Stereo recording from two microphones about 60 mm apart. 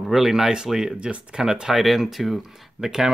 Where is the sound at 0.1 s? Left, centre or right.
Centre.